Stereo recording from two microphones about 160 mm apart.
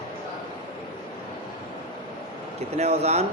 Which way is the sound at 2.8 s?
40° right (ahead or behind).